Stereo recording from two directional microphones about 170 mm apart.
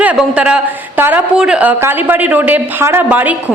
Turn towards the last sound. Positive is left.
turn(degrees=-10)  # may be behind; listen again after turning